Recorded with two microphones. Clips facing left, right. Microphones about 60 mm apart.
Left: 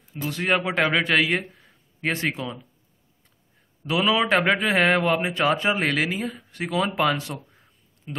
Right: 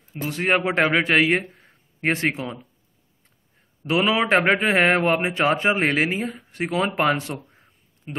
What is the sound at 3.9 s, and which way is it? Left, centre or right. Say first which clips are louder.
A man's voice: right 2 dB; right.